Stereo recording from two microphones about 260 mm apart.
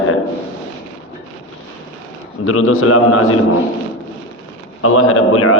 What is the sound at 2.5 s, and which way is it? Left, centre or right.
Speech, left.